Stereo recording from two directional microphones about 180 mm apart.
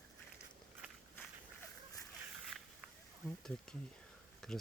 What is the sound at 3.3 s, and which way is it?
Speech, 5° left (ahead or behind).